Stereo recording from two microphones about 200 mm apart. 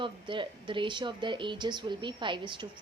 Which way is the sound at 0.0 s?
25° right (ahead or behind).